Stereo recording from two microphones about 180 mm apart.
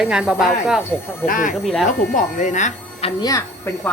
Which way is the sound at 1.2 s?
50° left (ahead or behind).